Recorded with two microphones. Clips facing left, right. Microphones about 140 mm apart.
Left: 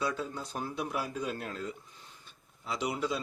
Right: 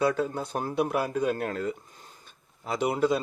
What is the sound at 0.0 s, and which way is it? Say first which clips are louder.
A man's voice: right 8 dB; 60° right (ahead or behind).